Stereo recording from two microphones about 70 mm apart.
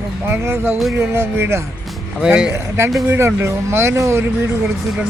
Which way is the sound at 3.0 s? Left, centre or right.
Right.